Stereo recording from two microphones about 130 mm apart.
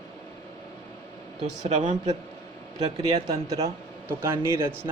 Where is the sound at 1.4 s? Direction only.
65° right (ahead or behind).